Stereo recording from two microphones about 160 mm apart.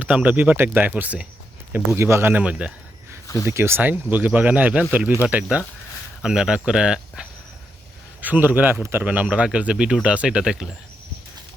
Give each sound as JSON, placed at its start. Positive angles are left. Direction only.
{"t": 0.0, "sound": "speech", "side_deg": -10}
{"t": 3.2, "sound": "speech", "side_deg": 20}
{"t": 3.5, "sound": "speech", "side_deg": -15}